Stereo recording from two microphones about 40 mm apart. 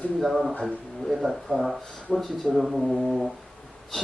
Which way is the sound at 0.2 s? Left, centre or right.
Centre.